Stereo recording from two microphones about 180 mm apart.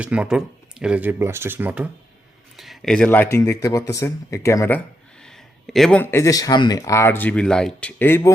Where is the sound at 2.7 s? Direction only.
5° left (ahead or behind).